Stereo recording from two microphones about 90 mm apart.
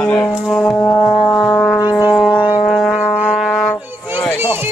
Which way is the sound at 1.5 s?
10° left (ahead or behind).